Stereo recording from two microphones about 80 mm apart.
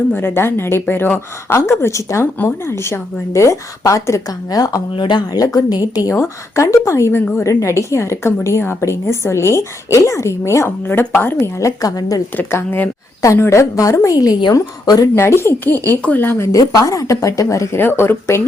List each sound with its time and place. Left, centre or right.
0.1 s a woman's voice: left
4.9 s a woman's voice: left
11.0 s a woman's voice: left
11.8 s speech: left
12.4 s a woman's voice: left
13.2 s a woman's voice: left
15.1 s a woman's voice: left
16.5 s speech: left
17.7 s a woman's voice: left